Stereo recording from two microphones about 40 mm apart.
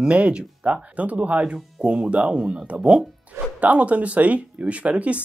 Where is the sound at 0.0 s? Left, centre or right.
Right.